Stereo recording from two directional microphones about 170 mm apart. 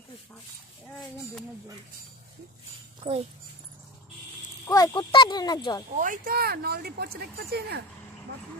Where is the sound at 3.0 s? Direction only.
35° right (ahead or behind).